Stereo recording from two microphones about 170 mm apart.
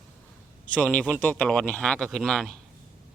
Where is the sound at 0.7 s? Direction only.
10° left (ahead or behind).